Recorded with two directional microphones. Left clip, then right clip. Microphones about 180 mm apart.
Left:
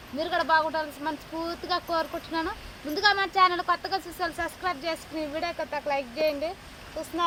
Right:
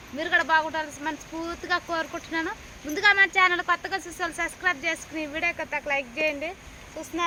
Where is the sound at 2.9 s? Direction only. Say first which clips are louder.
Right 4 dB; 30° right (ahead or behind).